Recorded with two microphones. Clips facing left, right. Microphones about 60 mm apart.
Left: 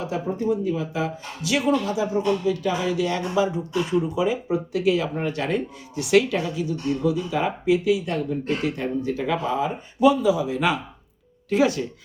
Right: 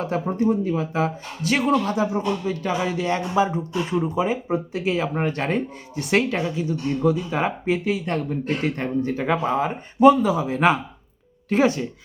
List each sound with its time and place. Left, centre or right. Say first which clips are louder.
0.4 s speech: right 2 dB; right
5.1 s speech: right 1 dB; right